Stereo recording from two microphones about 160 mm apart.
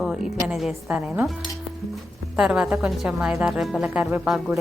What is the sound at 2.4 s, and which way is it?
A woman's voice, 5° right (ahead or behind).